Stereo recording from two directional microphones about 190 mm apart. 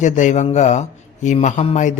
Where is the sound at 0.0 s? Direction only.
40° left (ahead or behind).